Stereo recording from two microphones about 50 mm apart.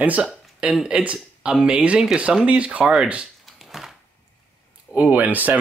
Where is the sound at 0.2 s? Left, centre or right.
Centre.